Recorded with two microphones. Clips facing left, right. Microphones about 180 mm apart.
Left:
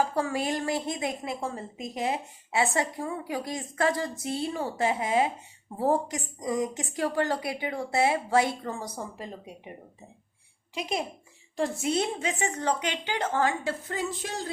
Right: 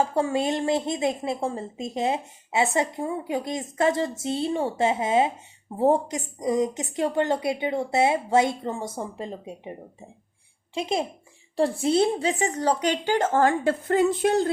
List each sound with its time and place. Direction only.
0.0 s speech: 25° right (ahead or behind)
10.8 s a woman's voice: 25° right (ahead or behind); by 14.5 s 60° right (ahead or behind)